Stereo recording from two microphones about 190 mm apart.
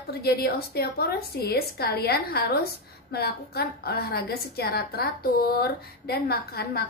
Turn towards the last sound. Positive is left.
turn(degrees=55)  # may be behind; listen again after turning